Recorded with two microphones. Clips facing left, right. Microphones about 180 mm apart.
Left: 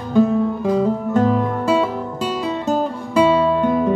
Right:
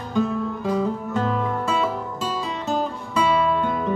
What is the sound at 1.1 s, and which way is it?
Music, 40° left (ahead or behind).